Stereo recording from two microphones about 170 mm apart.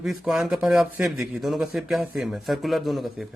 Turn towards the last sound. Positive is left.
turn(degrees=0)  # may be behind; listen again after turning